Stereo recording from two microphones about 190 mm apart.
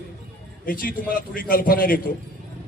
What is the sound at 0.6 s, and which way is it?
A man's voice, 50° left (ahead or behind).